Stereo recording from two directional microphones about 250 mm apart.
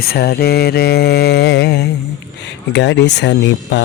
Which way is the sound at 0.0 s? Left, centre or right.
Left.